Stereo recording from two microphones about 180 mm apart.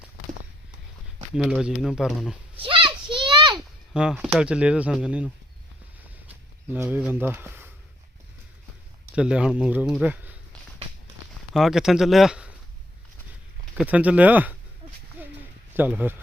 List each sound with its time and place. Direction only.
1.4 s speech: 5° right (ahead or behind)
2.6 s a sound: 30° right (ahead or behind)
3.9 s speech: 5° right (ahead or behind)
6.7 s speech: 10° right (ahead or behind)
9.1 s speech: 5° right (ahead or behind)
11.5 s speech: centre (ahead or behind)
13.7 s speech: 10° right (ahead or behind)
15.7 s a man's voice: 10° right (ahead or behind)